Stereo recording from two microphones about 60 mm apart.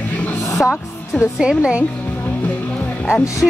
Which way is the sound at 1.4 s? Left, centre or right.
Centre.